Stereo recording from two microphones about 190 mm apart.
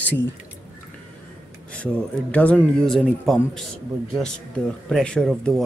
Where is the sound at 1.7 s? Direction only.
5° left (ahead or behind).